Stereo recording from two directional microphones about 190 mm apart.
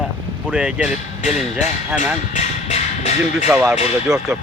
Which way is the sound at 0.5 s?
5° right (ahead or behind).